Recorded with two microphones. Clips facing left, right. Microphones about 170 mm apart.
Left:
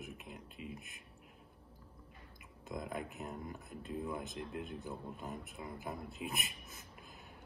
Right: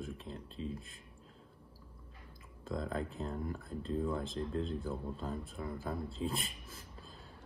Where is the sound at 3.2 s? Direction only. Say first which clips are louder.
Right 5 dB; 20° left (ahead or behind).